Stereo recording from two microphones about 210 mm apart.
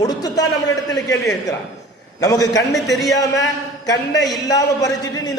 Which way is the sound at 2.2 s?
15° left (ahead or behind).